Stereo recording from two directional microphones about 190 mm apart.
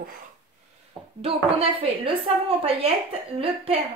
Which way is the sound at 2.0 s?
25° right (ahead or behind).